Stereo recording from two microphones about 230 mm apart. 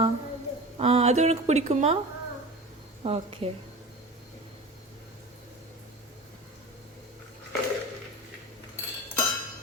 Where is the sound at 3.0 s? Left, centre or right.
Right.